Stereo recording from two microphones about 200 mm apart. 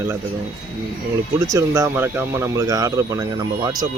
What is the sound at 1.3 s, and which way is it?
Speech, 15° right (ahead or behind).